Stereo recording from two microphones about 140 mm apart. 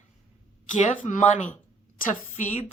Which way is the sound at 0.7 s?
60° left (ahead or behind).